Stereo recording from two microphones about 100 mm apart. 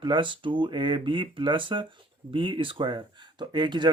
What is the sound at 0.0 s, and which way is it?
Speech, 55° right (ahead or behind).